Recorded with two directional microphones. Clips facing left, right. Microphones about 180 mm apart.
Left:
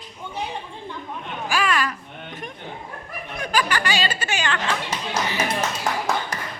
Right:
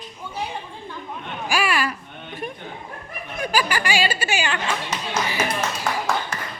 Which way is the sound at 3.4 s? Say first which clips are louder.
Right 1 dB; 10° right (ahead or behind).